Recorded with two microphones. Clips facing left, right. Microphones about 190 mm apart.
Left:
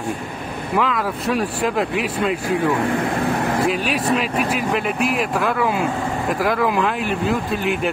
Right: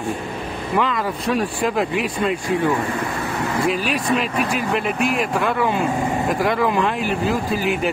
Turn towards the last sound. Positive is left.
turn(degrees=0)  # may be behind; listen again after turning